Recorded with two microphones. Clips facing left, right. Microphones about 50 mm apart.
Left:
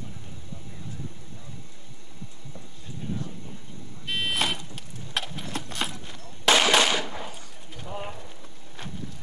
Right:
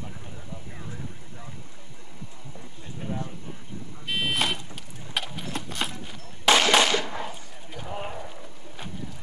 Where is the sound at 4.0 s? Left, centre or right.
Centre.